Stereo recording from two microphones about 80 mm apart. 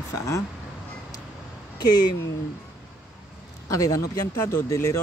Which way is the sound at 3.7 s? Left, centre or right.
Left.